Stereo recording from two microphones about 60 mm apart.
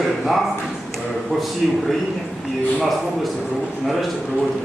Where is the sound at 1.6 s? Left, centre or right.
Centre.